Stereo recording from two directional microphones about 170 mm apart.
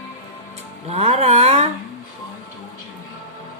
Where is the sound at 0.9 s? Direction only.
40° right (ahead or behind).